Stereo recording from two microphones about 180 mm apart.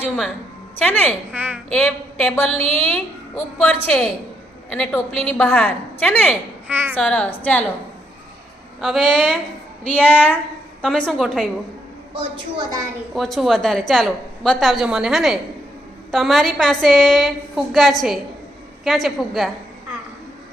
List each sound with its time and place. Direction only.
0.8 s a woman's voice: 10° left (ahead or behind)
1.3 s speech: 10° right (ahead or behind)
1.7 s a woman's voice: 5° left (ahead or behind)
2.5 s a woman's voice: 35° right (ahead or behind)
3.8 s a woman's voice: 5° left (ahead or behind)
6.7 s speech: 10° right (ahead or behind)
6.9 s a woman's voice: 5° left (ahead or behind)
8.8 s a woman's voice: centre (ahead or behind)
12.5 s a woman's voice: 20° right (ahead or behind)
13.1 s a woman's voice: centre (ahead or behind)